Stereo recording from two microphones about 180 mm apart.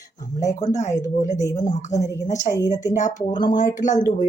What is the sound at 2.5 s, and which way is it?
Speech, 45° left (ahead or behind).